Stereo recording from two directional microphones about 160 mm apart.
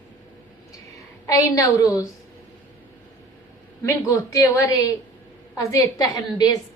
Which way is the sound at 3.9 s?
20° left (ahead or behind).